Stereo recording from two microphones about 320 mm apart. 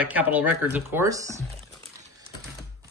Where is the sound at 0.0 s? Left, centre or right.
Centre.